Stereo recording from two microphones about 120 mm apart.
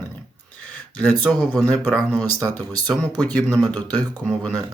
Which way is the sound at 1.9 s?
Centre (ahead or behind).